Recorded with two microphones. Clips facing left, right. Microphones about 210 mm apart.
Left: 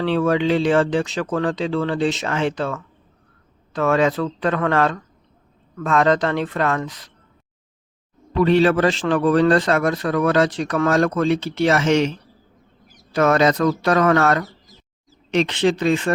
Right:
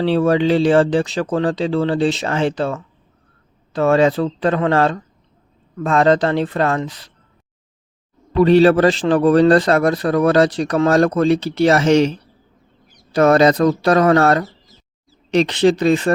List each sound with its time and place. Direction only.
0.0 s a man's voice: 35° right (ahead or behind)
8.4 s a man's voice: 35° right (ahead or behind)